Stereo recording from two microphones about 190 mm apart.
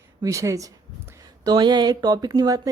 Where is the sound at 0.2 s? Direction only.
15° right (ahead or behind).